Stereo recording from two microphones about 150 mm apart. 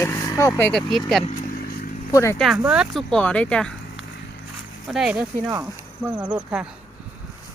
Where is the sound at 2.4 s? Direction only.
5° right (ahead or behind).